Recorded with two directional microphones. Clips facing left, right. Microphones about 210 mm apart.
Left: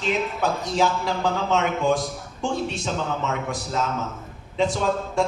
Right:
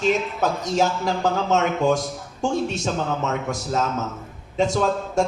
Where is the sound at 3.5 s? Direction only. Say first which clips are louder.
Right 2 dB; 45° right (ahead or behind).